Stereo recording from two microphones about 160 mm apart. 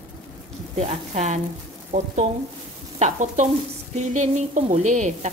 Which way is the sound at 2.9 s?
45° right (ahead or behind).